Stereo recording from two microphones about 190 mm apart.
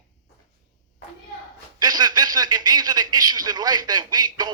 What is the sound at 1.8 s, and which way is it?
Speech, 20° right (ahead or behind).